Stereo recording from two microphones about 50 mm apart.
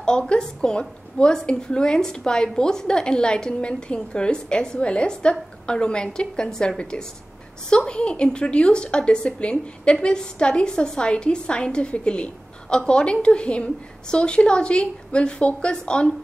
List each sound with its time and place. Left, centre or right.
0.3 s a woman's voice: centre